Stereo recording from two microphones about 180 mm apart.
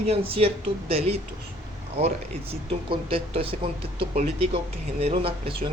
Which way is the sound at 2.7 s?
30° right (ahead or behind).